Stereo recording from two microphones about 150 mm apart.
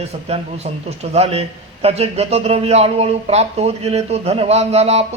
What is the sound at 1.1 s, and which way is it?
A man's voice, 45° right (ahead or behind).